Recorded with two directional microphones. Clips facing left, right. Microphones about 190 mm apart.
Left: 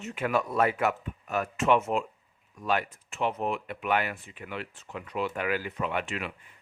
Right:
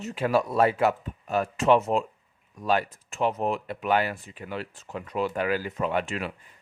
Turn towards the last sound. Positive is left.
turn(degrees=-40)  # may be behind; listen again after turning